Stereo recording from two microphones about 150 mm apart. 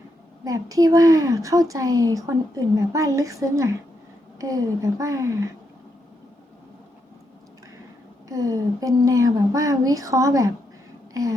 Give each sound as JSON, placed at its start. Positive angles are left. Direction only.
{"t": 0.4, "sound": "speech", "side_deg": -20}
{"t": 8.3, "sound": "speech", "side_deg": -20}
{"t": 11.1, "sound": "a sound", "side_deg": -20}